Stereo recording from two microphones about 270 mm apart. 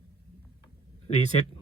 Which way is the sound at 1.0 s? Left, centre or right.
Left.